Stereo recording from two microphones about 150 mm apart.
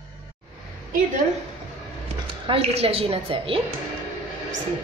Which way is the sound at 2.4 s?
40° right (ahead or behind).